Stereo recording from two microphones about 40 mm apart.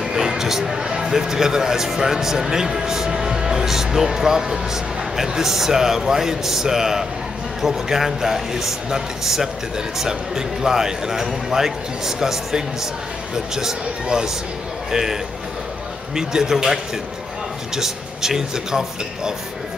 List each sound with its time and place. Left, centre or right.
0.1 s a man's voice: centre
16.2 s a man's voice: centre